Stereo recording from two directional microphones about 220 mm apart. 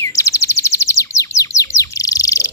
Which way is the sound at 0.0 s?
15° left (ahead or behind).